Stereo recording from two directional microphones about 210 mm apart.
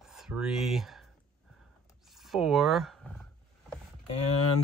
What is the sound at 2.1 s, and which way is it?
Speech, centre (ahead or behind).